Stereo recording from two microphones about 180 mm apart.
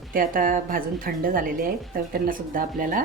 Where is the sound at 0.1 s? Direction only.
50° right (ahead or behind).